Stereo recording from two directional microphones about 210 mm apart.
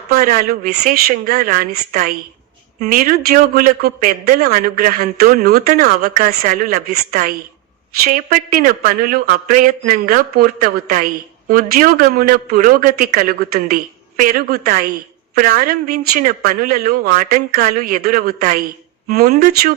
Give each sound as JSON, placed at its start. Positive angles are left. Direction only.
{"t": 0.1, "sound": "speech", "side_deg": -45}